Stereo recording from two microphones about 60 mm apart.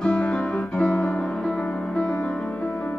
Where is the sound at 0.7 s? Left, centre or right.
Centre.